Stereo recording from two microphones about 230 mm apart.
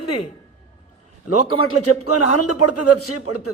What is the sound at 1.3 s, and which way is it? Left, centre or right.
A man's voice, left.